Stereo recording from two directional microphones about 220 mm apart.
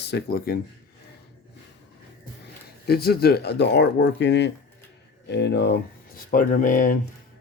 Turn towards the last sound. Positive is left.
turn(degrees=35)  # may be behind; listen again after turning